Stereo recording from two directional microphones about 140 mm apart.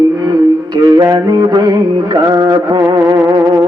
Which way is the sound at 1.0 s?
25° right (ahead or behind).